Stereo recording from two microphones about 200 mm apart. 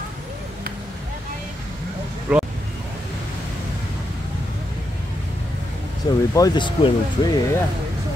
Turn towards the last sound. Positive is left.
turn(degrees=20)  # may be behind; listen again after turning